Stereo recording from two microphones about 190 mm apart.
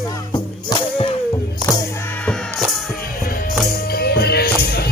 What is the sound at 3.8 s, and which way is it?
Music, 55° left (ahead or behind).